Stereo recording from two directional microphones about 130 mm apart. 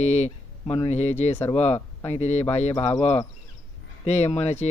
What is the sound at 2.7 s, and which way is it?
Speech, 15° left (ahead or behind).